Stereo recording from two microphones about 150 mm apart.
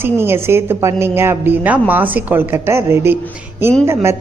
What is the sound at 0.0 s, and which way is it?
A woman's voice, 15° right (ahead or behind).